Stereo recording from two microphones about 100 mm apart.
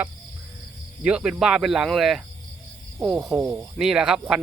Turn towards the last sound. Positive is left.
turn(degrees=-5)  # may be behind; listen again after turning